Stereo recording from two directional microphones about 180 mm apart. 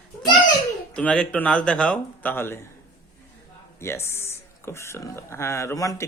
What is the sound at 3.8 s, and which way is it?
Speech, 15° left (ahead or behind).